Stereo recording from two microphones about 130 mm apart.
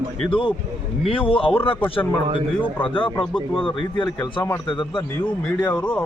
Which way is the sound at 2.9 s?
40° left (ahead or behind).